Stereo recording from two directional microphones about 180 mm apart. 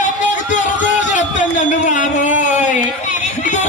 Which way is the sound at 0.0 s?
45° left (ahead or behind).